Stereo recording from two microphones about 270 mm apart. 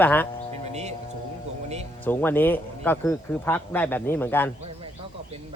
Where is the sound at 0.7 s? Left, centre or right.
Right.